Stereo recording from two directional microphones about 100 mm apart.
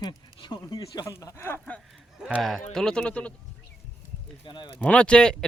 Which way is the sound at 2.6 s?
5° left (ahead or behind).